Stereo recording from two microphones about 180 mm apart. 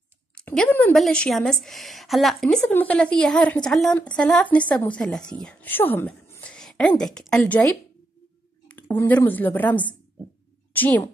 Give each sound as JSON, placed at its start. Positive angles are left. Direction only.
{"t": 0.3, "sound": "a woman's voice", "side_deg": 5}
{"t": 8.6, "sound": "a sound", "side_deg": 10}
{"t": 9.3, "sound": "a woman's voice", "side_deg": 10}